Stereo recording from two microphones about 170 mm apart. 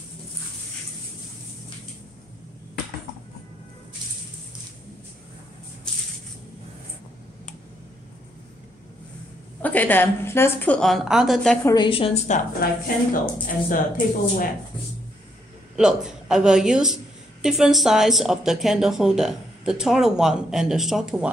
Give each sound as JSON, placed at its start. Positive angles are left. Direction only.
{"t": 9.6, "sound": "a woman's voice", "side_deg": 10}
{"t": 11.6, "sound": "a woman's voice", "side_deg": 25}
{"t": 12.5, "sound": "speech", "side_deg": 55}
{"t": 15.7, "sound": "a woman's voice", "side_deg": -5}